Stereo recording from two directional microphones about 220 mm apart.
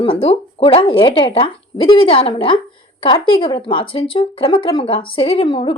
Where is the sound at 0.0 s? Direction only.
25° left (ahead or behind).